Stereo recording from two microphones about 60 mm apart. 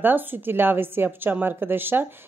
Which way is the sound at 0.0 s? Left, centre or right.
Right.